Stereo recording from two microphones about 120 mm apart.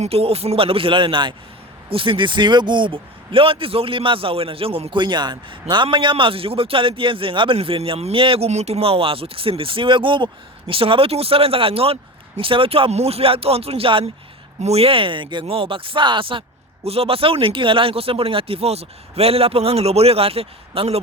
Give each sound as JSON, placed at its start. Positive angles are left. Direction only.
{"t": 0.0, "sound": "speech", "side_deg": -55}
{"t": 16.8, "sound": "speech", "side_deg": -55}